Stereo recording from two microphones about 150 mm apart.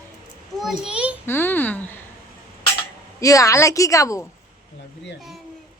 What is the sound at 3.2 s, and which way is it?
A woman's voice, 20° left (ahead or behind).